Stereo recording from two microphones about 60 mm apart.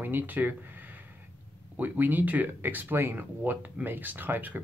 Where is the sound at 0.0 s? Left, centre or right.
Right.